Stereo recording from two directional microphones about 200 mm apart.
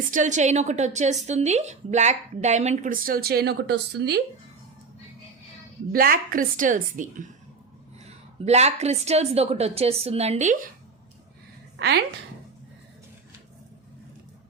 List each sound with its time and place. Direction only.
0.1 s a woman's voice: 40° right (ahead or behind); by 4.2 s 55° right (ahead or behind)
5.9 s a woman's voice: 45° right (ahead or behind)
8.4 s a woman's voice: 35° right (ahead or behind)
11.8 s a woman's voice: 55° right (ahead or behind)